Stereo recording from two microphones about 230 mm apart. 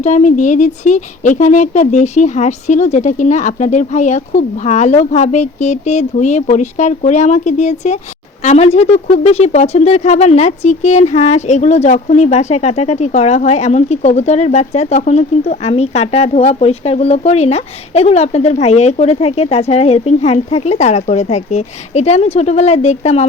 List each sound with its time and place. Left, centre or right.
0.0 s speech: left